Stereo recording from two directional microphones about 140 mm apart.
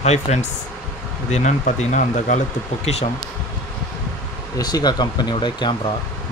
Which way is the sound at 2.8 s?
50° left (ahead or behind).